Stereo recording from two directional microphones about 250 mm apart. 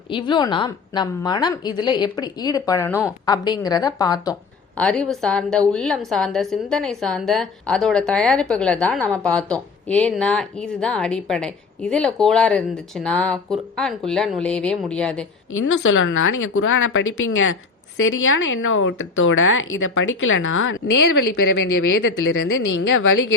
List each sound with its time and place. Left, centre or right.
0.1 s a woman's voice: centre
4.8 s a woman's voice: centre
15.6 s a woman's voice: left